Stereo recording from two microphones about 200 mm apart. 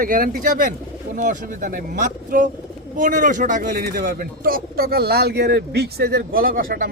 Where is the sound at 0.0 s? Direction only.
45° right (ahead or behind).